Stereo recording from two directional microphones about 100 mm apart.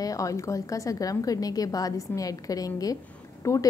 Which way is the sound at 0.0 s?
35° left (ahead or behind).